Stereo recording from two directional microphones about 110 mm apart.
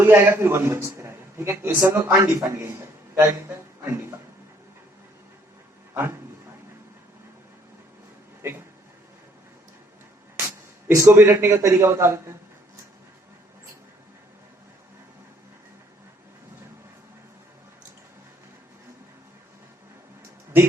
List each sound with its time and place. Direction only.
0.0 s a man's voice: 20° right (ahead or behind)
3.8 s a man's voice: 25° right (ahead or behind)
5.9 s a man's voice: 20° right (ahead or behind)
8.4 s speech: 20° right (ahead or behind)
10.3 s speech: 20° right (ahead or behind)